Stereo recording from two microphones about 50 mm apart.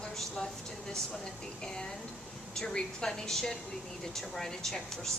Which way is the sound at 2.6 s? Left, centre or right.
Centre.